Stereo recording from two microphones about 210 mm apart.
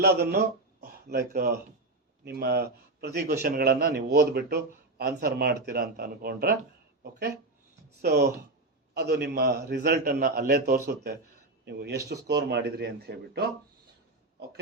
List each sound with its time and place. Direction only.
0.0 s a man's voice: 50° right (ahead or behind)